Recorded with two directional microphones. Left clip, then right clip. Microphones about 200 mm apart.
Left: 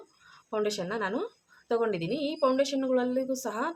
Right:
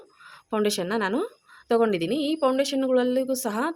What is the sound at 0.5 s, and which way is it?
A woman's voice, 45° right (ahead or behind).